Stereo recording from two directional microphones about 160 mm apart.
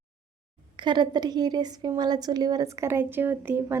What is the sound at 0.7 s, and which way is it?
A woman's voice, 30° right (ahead or behind).